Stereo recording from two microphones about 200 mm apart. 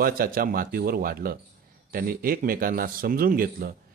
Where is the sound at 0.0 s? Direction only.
45° right (ahead or behind).